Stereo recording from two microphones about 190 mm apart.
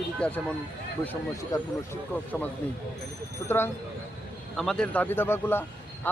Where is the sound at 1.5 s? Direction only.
15° left (ahead or behind).